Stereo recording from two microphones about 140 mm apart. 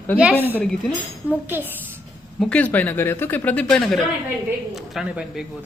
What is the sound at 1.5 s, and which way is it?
Speech, 15° right (ahead or behind).